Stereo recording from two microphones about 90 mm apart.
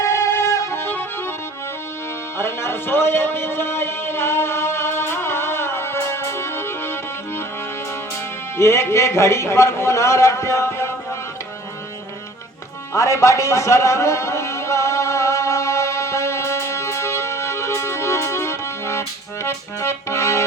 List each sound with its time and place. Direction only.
0.0 s music: 35° left (ahead or behind)
2.4 s music: 30° left (ahead or behind)
8.5 s a man's voice: 30° left (ahead or behind)
12.9 s music: 35° left (ahead or behind)